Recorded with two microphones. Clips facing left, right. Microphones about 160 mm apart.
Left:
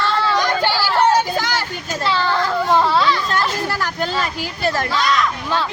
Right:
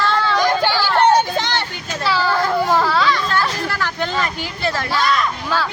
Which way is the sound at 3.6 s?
15° left (ahead or behind).